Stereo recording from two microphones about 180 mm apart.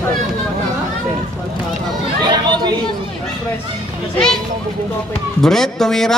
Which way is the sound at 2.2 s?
25° right (ahead or behind).